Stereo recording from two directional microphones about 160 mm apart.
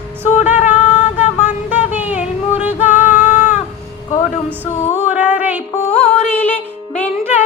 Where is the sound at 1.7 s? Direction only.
10° right (ahead or behind).